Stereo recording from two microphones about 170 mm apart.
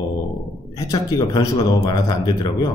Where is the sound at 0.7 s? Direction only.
20° left (ahead or behind).